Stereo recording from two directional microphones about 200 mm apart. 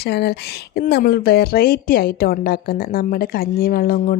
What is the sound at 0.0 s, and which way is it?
A woman's voice, 55° left (ahead or behind).